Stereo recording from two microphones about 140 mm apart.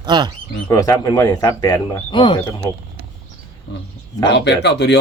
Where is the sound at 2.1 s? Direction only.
35° left (ahead or behind).